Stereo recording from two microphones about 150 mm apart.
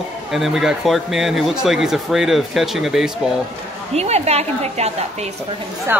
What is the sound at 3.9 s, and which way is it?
A woman's voice, 45° right (ahead or behind).